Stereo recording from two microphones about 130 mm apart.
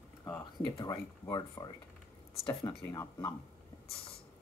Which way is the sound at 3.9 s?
45° left (ahead or behind).